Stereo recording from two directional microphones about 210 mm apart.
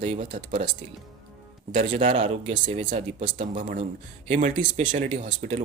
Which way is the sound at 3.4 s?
40° right (ahead or behind).